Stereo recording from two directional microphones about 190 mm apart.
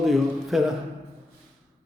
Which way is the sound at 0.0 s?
Centre (ahead or behind).